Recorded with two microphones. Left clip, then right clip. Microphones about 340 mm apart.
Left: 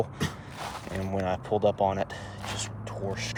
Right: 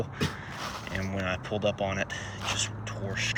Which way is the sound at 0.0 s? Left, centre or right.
Left.